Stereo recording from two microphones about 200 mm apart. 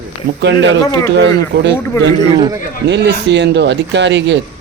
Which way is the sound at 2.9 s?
60° right (ahead or behind).